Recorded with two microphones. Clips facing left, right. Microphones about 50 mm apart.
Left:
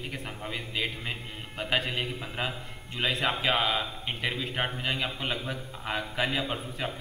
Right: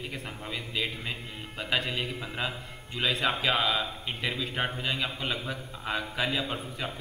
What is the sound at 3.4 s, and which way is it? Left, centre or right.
A man's voice, centre.